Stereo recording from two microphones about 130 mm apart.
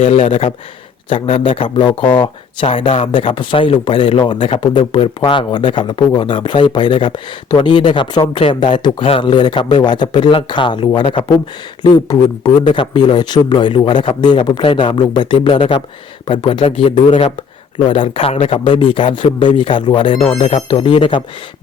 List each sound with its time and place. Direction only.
0.0 s speech: 70° left (ahead or behind)
0.3 s speech: 45° left (ahead or behind)
4.8 s speech: 55° left (ahead or behind); by 11.0 s 35° left (ahead or behind)
11.0 s speech: 50° left (ahead or behind)
11.8 s speech: 30° left (ahead or behind)
17.1 s speech: 60° left (ahead or behind)
17.8 s speech: 40° left (ahead or behind)